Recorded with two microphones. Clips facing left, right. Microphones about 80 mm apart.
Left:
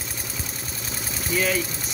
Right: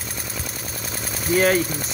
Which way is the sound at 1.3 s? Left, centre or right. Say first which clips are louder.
Right 6 dB; right.